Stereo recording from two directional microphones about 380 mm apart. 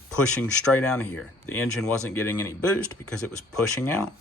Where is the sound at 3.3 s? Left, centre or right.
Centre.